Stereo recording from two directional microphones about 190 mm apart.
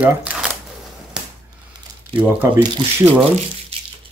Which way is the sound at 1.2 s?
5° right (ahead or behind).